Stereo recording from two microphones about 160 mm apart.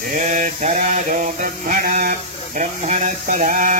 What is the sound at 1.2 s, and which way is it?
Music, 60° right (ahead or behind).